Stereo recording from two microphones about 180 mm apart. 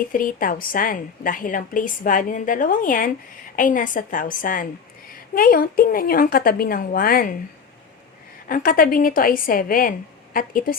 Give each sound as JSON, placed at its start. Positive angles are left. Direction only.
{"t": 0.1, "sound": "a woman's voice", "side_deg": 50}
{"t": 8.4, "sound": "a woman's voice", "side_deg": 50}